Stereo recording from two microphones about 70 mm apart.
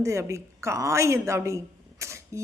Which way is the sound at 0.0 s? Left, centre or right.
Right.